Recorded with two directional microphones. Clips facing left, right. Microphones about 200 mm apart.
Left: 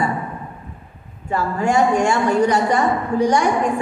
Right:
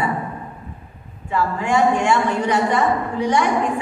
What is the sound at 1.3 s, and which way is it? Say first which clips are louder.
A woman's voice: left 1 dB; 40° left (ahead or behind).